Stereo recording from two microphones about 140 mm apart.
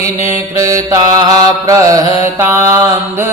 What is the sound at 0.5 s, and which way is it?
Mantra, 25° right (ahead or behind).